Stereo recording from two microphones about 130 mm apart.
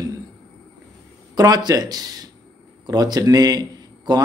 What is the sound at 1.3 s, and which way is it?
A man's voice, 30° right (ahead or behind).